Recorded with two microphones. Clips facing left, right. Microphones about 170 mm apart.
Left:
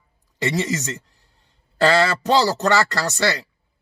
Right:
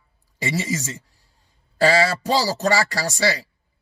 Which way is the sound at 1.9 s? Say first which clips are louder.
Left 2 dB; 65° left (ahead or behind).